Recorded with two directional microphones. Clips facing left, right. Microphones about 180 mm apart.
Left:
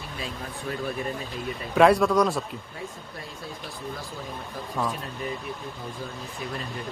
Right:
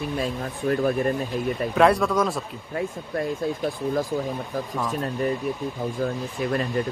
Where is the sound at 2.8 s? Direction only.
55° right (ahead or behind).